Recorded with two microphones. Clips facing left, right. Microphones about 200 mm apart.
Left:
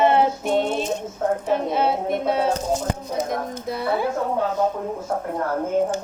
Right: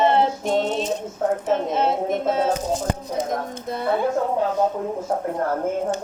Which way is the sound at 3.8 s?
5° left (ahead or behind).